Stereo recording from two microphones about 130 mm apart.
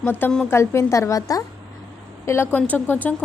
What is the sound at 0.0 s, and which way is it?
A woman's voice, 15° left (ahead or behind).